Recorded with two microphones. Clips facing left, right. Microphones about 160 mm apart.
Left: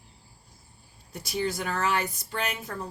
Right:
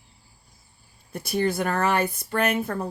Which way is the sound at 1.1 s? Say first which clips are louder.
Right 5 dB; 55° right (ahead or behind).